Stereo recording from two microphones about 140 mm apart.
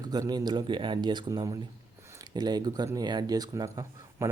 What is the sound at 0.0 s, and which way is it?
Speech, 30° right (ahead or behind).